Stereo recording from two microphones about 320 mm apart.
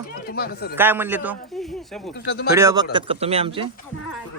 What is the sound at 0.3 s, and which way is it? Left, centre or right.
Speech, left.